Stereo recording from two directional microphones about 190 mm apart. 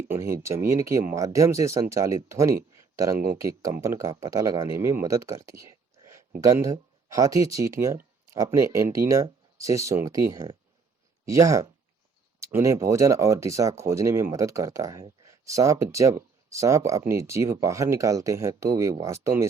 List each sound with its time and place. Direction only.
0.1 s speech: 15° right (ahead or behind)